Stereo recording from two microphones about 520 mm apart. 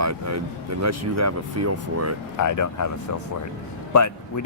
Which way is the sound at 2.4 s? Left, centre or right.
Left.